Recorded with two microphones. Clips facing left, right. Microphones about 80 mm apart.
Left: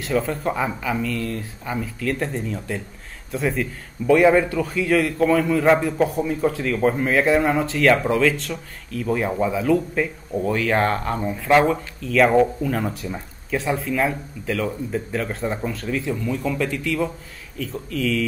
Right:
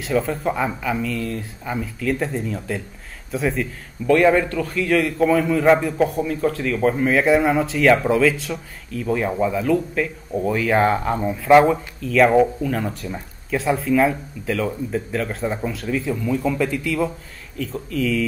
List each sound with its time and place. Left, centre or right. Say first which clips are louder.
0.0 s speech: right 1 dB; centre